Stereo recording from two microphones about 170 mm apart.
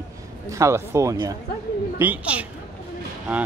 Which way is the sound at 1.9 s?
10° right (ahead or behind).